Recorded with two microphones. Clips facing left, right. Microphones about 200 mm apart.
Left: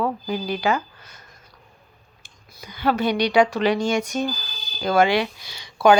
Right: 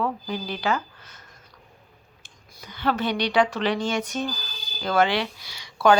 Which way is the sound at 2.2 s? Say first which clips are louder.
Left 3 dB; 10° left (ahead or behind).